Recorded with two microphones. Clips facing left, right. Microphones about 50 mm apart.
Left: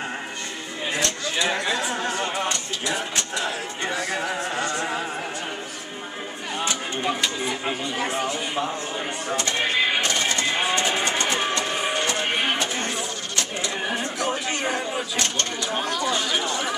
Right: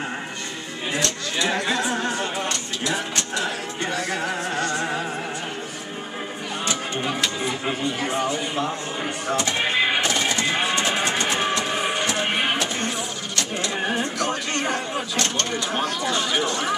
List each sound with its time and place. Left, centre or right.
0.9 s speech: centre
2.4 s music: centre
6.7 s music: centre
9.3 s music: centre
13.7 s a sound: centre
14.1 s a sound: centre
15.0 s speech: centre